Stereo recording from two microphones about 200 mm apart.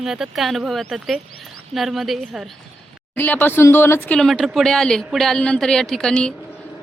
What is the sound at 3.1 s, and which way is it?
A woman's voice, 10° left (ahead or behind).